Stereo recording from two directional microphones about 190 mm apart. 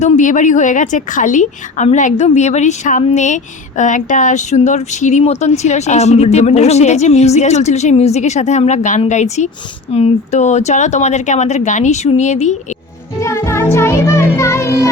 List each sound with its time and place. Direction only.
0.0 s a woman's voice: 40° left (ahead or behind)
13.1 s music: 15° left (ahead or behind)